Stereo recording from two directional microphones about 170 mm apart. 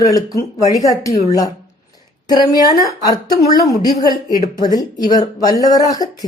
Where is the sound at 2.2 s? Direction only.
25° left (ahead or behind).